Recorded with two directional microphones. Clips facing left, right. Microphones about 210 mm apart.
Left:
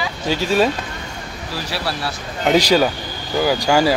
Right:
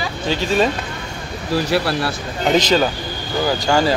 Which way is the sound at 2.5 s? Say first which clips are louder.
Left 1 dB; 10° left (ahead or behind).